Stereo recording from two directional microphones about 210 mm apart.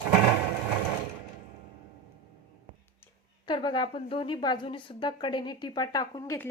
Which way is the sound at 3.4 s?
20° left (ahead or behind).